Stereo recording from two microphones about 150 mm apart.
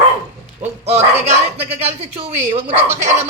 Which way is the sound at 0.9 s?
45° right (ahead or behind).